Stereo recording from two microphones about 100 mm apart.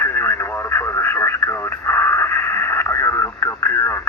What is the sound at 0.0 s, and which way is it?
Radio, 25° left (ahead or behind).